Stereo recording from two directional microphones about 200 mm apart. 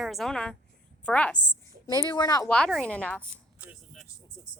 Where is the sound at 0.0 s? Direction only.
Centre (ahead or behind).